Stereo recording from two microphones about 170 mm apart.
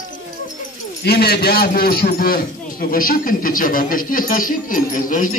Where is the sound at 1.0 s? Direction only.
70° left (ahead or behind).